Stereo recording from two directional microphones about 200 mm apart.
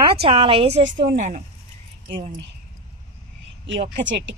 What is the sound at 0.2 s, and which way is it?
A woman's voice, 30° right (ahead or behind).